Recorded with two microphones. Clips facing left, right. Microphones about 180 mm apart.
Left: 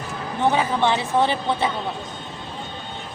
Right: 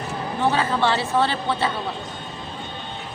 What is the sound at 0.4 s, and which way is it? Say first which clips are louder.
A woman's voice: left 1 dB; 15° left (ahead or behind).